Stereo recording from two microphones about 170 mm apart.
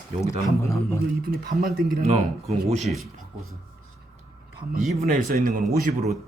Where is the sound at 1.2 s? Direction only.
60° right (ahead or behind).